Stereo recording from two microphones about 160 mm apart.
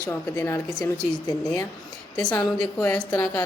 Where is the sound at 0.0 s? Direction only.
20° left (ahead or behind).